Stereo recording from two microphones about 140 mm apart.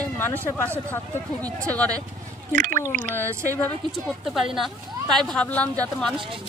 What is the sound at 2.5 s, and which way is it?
Speech, 75° right (ahead or behind).